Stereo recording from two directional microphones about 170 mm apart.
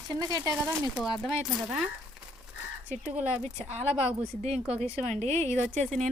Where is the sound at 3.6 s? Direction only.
40° right (ahead or behind).